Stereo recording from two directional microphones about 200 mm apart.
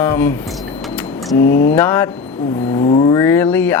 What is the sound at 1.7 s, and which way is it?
Speech, 10° left (ahead or behind).